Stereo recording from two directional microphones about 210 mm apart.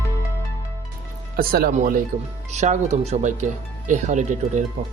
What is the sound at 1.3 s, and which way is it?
Speech, 45° right (ahead or behind).